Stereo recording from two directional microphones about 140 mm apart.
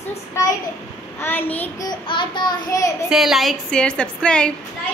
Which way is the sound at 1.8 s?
35° left (ahead or behind).